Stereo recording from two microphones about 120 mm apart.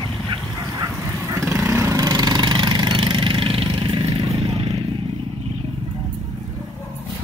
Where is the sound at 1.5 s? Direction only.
25° right (ahead or behind); by 3.6 s 50° right (ahead or behind).